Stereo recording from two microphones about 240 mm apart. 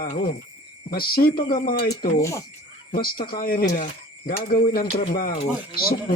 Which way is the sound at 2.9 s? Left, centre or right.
Left.